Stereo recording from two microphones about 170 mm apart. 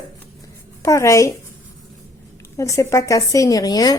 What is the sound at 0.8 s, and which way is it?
Speech, 15° left (ahead or behind).